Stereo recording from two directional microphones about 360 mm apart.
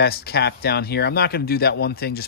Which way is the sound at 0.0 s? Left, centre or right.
Left.